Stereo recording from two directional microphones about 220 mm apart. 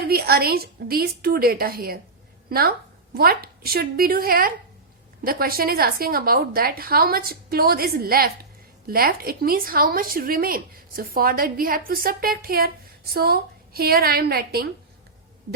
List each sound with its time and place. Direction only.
0.0 s a woman's voice: 45° right (ahead or behind)